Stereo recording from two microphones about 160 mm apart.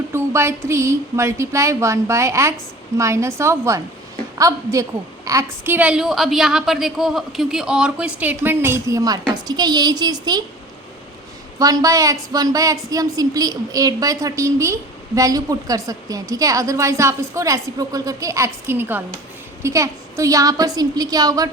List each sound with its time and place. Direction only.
0.1 s a woman's voice: 15° right (ahead or behind)
11.6 s a woman's voice: 20° right (ahead or behind)